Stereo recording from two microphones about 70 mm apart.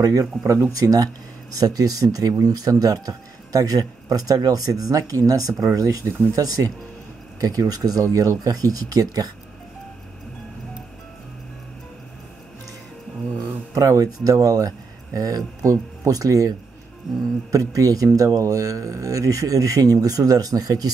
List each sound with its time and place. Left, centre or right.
0.0 s speech: right
13.7 s speech: right